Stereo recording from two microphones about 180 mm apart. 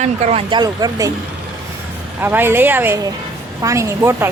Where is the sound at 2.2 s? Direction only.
10° right (ahead or behind).